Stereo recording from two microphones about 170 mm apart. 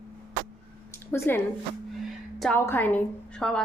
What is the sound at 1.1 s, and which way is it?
Speech, 15° left (ahead or behind).